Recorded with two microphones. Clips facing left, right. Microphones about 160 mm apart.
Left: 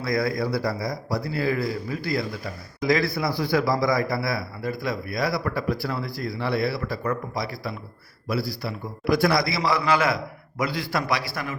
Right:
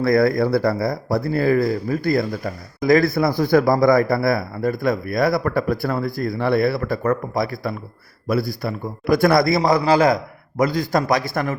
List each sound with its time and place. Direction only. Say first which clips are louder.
0.0 s speech: right 8 dB; 55° right (ahead or behind)